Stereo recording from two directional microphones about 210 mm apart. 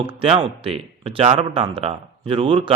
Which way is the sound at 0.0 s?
25° right (ahead or behind).